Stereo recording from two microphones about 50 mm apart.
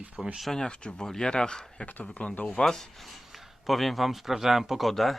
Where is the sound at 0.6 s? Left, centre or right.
Centre.